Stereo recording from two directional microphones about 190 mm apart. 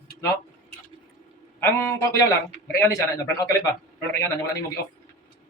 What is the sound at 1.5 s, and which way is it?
Speech, 10° left (ahead or behind).